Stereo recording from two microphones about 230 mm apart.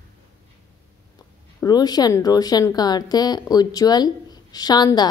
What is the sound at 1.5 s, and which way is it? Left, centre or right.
A woman's voice, centre.